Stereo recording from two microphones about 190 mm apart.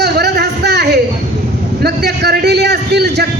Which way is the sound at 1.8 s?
60° right (ahead or behind).